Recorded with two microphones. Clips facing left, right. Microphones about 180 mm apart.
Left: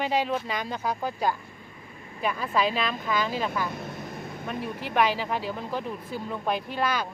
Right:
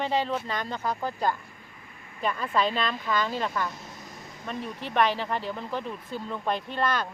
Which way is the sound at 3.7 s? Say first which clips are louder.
Left 8 dB; 60° left (ahead or behind).